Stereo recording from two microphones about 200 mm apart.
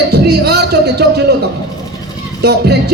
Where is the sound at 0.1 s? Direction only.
55° right (ahead or behind).